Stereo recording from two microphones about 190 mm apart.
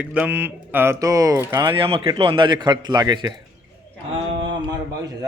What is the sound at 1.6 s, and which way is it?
A man's voice, 30° right (ahead or behind).